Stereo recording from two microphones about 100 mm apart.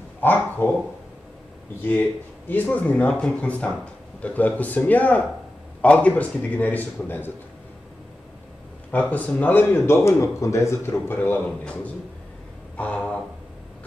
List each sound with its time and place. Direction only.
0.2 s a man's voice: 20° left (ahead or behind)
1.8 s speech: 20° left (ahead or behind)
8.9 s a man's voice: 15° left (ahead or behind)